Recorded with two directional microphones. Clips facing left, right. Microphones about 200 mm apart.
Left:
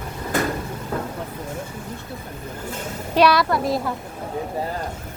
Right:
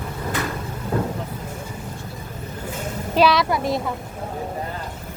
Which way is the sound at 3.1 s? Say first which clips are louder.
Left 1 dB; centre (ahead or behind).